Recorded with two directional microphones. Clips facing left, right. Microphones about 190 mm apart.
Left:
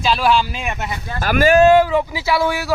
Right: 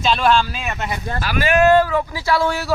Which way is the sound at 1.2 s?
45° left (ahead or behind).